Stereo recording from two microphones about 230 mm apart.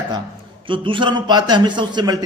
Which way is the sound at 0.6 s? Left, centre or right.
Right.